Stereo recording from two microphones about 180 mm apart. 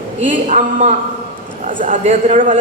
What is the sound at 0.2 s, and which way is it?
A man's voice, 45° right (ahead or behind).